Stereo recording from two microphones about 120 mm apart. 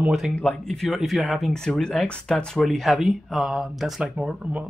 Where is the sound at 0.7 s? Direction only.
Centre (ahead or behind).